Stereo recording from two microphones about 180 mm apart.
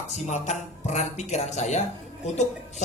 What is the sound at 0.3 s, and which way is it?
Speech, 40° left (ahead or behind).